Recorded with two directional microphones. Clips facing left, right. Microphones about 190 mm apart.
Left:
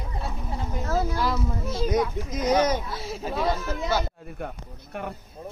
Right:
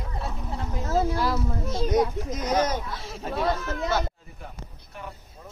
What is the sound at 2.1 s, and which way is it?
Speech, centre (ahead or behind).